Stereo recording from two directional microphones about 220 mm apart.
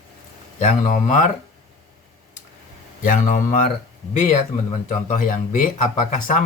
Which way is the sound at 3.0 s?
35° left (ahead or behind).